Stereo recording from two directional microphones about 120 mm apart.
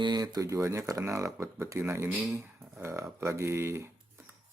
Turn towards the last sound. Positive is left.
turn(degrees=-20)  # may be behind; listen again after turning